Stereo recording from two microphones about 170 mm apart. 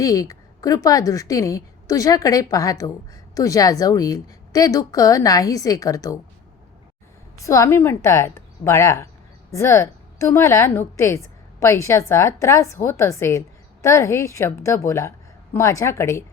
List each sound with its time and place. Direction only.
0.0 s a woman's voice: 20° left (ahead or behind)
7.4 s a woman's voice: 15° left (ahead or behind)